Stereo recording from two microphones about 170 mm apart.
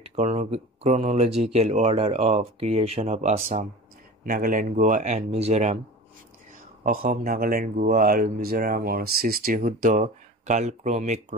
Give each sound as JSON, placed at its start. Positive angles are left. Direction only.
{"t": 0.0, "sound": "speech", "side_deg": -40}
{"t": 6.8, "sound": "speech", "side_deg": -55}